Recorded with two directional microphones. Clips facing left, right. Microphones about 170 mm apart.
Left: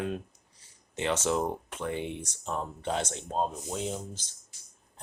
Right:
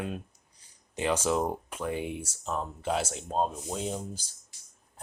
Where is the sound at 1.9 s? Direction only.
25° left (ahead or behind).